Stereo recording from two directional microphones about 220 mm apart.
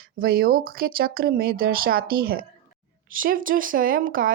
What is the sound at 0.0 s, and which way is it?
Speech, 45° right (ahead or behind).